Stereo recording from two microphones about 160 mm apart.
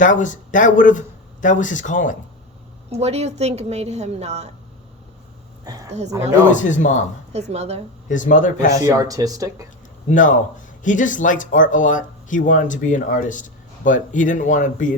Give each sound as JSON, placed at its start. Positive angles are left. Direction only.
{"t": 0.0, "sound": "speech", "side_deg": 50}
{"t": 2.9, "sound": "a woman's voice", "side_deg": -40}
{"t": 5.6, "sound": "a sound", "side_deg": -20}
{"t": 6.5, "sound": "speech", "side_deg": 50}
{"t": 7.3, "sound": "a woman's voice", "side_deg": -45}
{"t": 8.1, "sound": "speech", "side_deg": 55}
{"t": 8.8, "sound": "speech", "side_deg": -20}
{"t": 10.1, "sound": "speech", "side_deg": 55}